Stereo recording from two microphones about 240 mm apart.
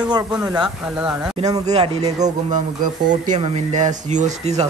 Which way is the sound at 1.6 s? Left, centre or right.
Right.